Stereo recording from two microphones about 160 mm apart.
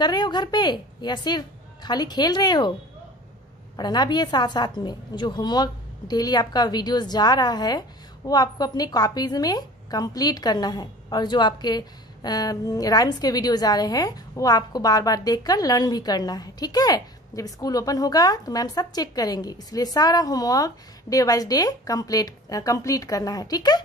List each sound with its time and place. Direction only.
0.0 s a woman's voice: 25° left (ahead or behind)
3.7 s a woman's voice: 25° left (ahead or behind)